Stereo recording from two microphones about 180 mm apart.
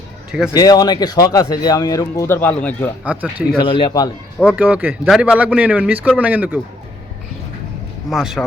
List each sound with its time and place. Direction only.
0.3 s speech: 5° right (ahead or behind)
0.5 s speech: 20° left (ahead or behind)
3.0 s a man's voice: 10° right (ahead or behind)
3.8 s speech: 25° left (ahead or behind)
4.4 s a man's voice: 10° right (ahead or behind)
8.1 s speech: centre (ahead or behind)